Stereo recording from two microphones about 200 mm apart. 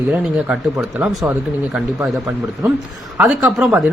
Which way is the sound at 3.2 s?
5° right (ahead or behind).